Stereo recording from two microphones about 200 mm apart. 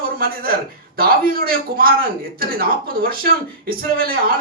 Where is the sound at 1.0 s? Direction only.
50° right (ahead or behind).